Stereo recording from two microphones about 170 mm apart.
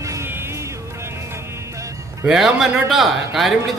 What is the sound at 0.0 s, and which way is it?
Music, 15° right (ahead or behind).